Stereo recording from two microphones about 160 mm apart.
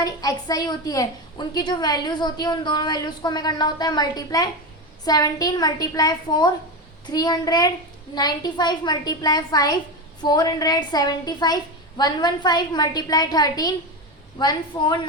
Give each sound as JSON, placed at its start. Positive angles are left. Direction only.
{"t": 0.0, "sound": "a woman's voice", "side_deg": 25}